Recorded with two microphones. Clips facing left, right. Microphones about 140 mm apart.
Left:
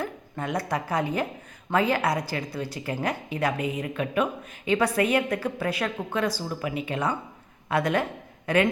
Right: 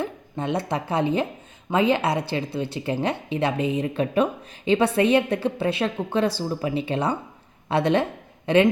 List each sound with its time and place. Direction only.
0.0 s a woman's voice: 25° right (ahead or behind)